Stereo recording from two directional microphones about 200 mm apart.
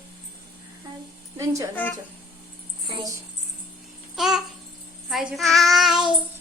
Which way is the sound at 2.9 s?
25° right (ahead or behind).